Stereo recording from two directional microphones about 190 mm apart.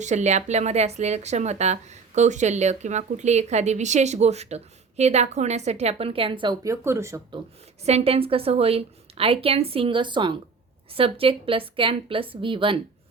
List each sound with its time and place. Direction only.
0.0 s speech: 40° right (ahead or behind); by 7.3 s 15° right (ahead or behind)
7.9 s a woman's voice: 30° right (ahead or behind)